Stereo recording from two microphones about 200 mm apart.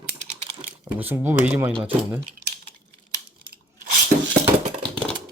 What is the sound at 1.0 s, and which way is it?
Speech, 10° right (ahead or behind).